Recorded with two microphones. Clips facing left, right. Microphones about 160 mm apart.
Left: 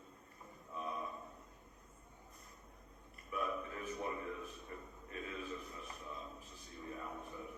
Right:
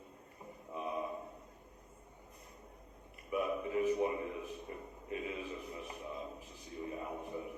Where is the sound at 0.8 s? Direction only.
10° right (ahead or behind).